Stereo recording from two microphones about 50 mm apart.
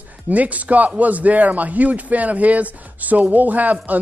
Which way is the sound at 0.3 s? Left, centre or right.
Right.